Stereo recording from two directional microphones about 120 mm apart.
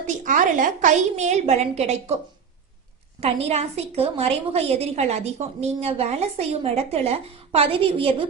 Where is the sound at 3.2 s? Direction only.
60° right (ahead or behind).